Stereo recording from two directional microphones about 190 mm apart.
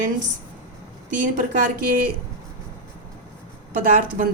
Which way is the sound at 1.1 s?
45° right (ahead or behind).